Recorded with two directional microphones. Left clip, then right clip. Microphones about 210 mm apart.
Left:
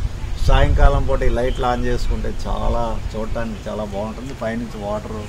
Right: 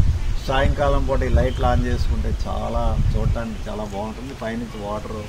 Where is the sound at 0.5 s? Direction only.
50° left (ahead or behind).